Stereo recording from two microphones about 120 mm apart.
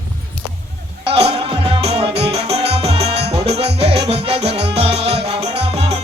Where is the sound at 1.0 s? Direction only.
50° right (ahead or behind).